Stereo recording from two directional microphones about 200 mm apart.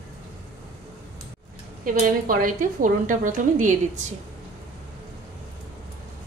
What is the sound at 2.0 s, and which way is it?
A woman's voice, 45° right (ahead or behind).